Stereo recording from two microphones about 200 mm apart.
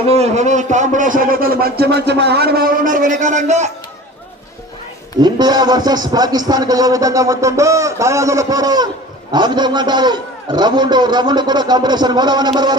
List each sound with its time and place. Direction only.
0.1 s a man's voice: 35° right (ahead or behind)
5.2 s a man's voice: 20° right (ahead or behind)